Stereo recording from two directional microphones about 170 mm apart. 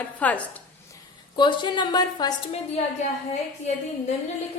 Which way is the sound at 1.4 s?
25° left (ahead or behind).